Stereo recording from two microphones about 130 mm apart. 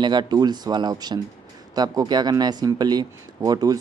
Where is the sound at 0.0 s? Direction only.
35° right (ahead or behind).